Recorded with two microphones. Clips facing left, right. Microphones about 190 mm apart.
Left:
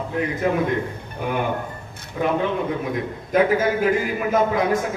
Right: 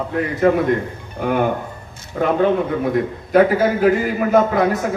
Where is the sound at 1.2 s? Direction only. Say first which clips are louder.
Right 5 dB; 55° right (ahead or behind).